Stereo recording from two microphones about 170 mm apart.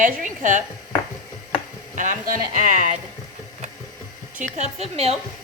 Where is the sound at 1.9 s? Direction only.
50° right (ahead or behind).